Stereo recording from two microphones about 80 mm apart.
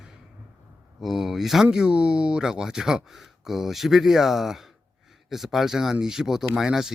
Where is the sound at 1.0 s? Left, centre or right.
Centre.